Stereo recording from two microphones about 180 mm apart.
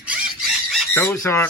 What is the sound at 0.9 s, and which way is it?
Speech, 10° left (ahead or behind).